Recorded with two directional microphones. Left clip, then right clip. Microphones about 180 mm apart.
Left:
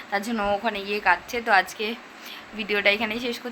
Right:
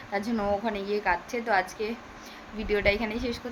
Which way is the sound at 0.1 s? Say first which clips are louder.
Left 3 dB; 5° right (ahead or behind).